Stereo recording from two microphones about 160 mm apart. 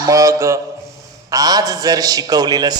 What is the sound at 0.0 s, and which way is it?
A man's voice, 20° right (ahead or behind).